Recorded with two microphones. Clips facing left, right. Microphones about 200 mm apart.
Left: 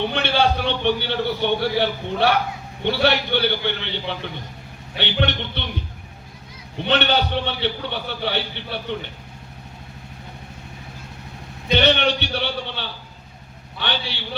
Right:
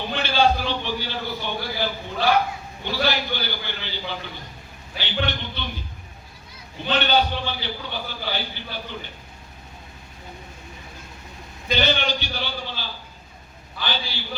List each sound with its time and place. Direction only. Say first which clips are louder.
0.0 s a man's voice: left 1 dB; 65° left (ahead or behind)
6.8 s a man's voice: left 1 dB; 65° left (ahead or behind)
11.7 s a man's voice: left 5 dB; 70° left (ahead or behind)